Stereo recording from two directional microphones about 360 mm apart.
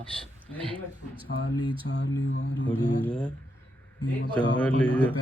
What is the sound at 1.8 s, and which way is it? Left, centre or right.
Speech, left.